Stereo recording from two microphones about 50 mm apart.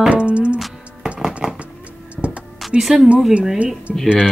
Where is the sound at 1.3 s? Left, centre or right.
Right.